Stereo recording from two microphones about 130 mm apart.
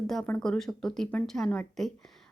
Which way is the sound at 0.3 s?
10° left (ahead or behind).